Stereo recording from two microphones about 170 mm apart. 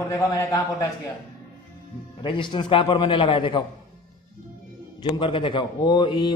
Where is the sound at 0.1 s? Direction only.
20° left (ahead or behind).